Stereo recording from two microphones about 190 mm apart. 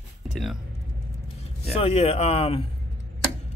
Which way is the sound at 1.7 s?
35° left (ahead or behind).